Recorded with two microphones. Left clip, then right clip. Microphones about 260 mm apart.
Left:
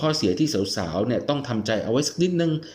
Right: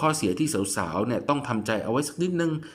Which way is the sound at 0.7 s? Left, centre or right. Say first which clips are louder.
Left 2 dB; centre.